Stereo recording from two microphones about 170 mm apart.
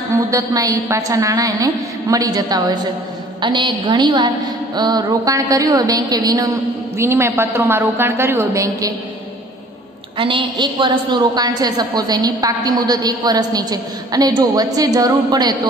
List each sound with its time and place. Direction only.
0.1 s a woman's voice: 20° right (ahead or behind)
10.1 s a woman's voice: 30° right (ahead or behind)